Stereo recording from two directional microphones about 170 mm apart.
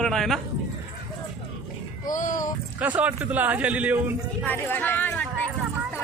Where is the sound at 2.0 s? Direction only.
50° left (ahead or behind).